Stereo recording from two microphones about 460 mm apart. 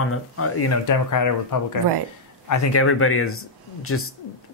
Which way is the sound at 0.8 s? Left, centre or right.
Left.